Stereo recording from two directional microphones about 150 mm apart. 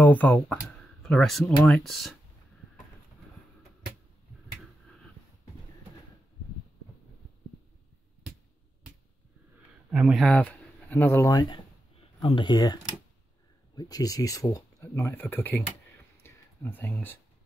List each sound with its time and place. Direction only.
0.0 s speech: 10° left (ahead or behind)
9.8 s speech: 5° right (ahead or behind)
10.2 s speech: 10° left (ahead or behind)
16.2 s a sound: 15° left (ahead or behind)
16.9 s speech: 10° left (ahead or behind)